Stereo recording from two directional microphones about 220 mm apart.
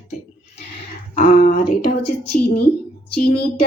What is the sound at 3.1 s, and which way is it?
Speech, 90° left.